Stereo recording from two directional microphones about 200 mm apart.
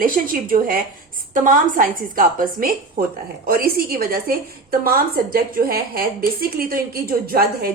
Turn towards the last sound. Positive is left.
turn(degrees=-50)  # may be behind; listen again after turning